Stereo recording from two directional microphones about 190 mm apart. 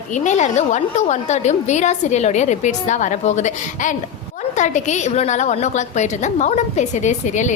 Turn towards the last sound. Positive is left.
turn(degrees=40)  # may be behind; listen again after turning